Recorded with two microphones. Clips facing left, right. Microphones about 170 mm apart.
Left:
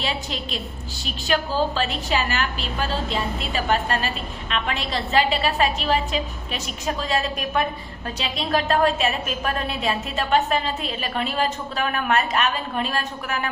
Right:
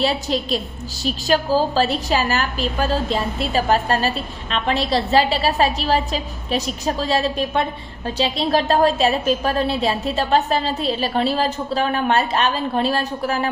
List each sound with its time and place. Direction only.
0.0 s a woman's voice: 40° right (ahead or behind)